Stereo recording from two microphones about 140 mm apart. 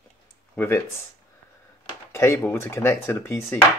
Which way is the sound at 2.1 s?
20° left (ahead or behind).